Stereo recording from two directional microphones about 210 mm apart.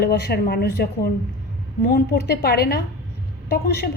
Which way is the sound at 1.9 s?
50° left (ahead or behind).